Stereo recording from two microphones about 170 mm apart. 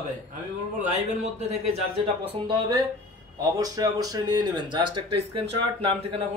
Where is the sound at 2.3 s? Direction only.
25° right (ahead or behind).